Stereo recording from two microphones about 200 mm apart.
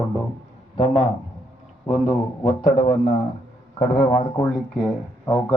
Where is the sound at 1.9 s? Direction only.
35° left (ahead or behind).